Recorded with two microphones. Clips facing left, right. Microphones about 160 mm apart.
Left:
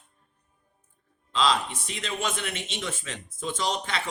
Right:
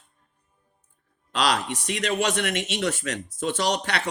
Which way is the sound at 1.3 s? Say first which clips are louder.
Right 1 dB; 70° right (ahead or behind).